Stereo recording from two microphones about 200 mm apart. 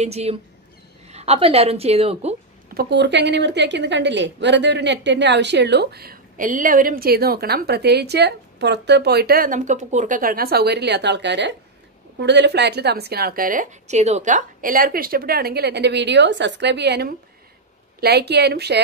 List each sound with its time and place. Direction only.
0.0 s a woman's voice: 30° right (ahead or behind)
2.7 s a woman's voice: 55° right (ahead or behind)